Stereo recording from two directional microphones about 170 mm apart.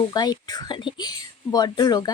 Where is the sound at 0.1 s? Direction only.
25° left (ahead or behind).